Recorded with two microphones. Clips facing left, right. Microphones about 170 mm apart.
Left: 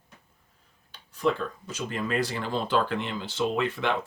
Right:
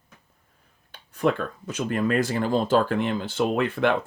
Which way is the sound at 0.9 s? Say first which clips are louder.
Right 3 dB; 55° right (ahead or behind).